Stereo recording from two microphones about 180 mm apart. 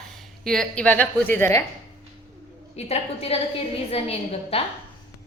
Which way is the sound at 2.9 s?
35° left (ahead or behind).